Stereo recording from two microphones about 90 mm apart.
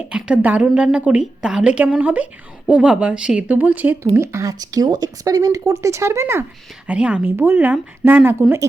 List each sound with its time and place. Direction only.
0.1 s a woman's voice: 10° right (ahead or behind)
4.0 s speech: 30° right (ahead or behind)
6.8 s a woman's voice: 15° right (ahead or behind)